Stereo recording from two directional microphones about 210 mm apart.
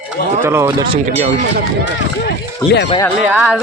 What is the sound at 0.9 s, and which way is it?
Speech, 30° right (ahead or behind).